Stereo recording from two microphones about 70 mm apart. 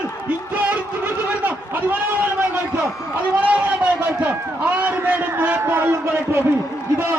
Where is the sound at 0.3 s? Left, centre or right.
Right.